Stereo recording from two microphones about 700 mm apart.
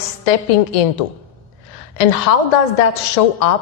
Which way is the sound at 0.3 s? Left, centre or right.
Left.